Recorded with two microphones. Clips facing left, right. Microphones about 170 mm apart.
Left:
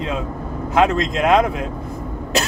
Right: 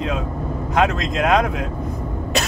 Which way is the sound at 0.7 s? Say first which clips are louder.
Left 3 dB; centre (ahead or behind).